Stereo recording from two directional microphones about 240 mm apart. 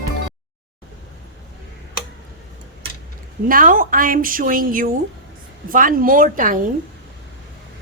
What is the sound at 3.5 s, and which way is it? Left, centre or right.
A woman's voice, right.